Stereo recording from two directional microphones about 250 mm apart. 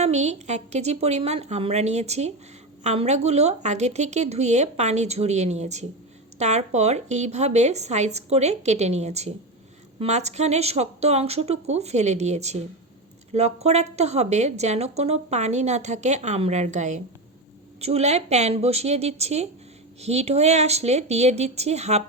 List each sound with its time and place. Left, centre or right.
0.0 s speech: right